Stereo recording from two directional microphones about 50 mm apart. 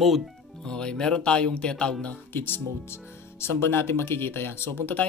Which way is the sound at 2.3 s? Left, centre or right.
Left.